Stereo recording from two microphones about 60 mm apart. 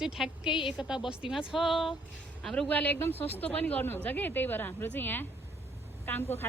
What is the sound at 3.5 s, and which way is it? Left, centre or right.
A woman's voice, left.